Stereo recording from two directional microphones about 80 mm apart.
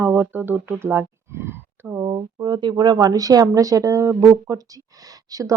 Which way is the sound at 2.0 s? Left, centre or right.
Right.